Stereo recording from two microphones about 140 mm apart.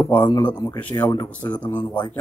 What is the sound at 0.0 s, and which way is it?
A man's voice, 15° left (ahead or behind).